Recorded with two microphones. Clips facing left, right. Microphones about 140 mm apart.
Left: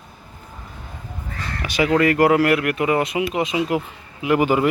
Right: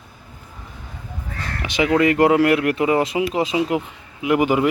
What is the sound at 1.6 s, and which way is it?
Speech, 20° right (ahead or behind).